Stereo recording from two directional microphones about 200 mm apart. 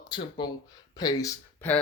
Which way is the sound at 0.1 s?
25° left (ahead or behind).